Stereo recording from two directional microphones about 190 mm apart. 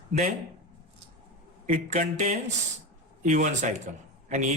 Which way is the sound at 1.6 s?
40° right (ahead or behind).